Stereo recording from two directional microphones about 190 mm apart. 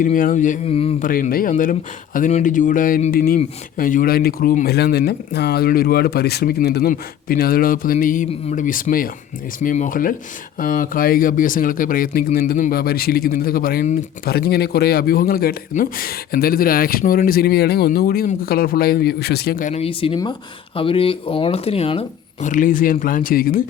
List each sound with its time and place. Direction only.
0.0 s speech: 45° left (ahead or behind)
1.0 s speech: 45° left (ahead or behind)